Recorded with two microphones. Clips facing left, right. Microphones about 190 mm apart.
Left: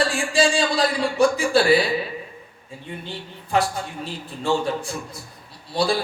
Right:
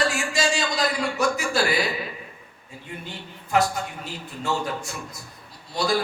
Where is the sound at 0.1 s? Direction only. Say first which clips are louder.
Left 5 dB; 30° left (ahead or behind).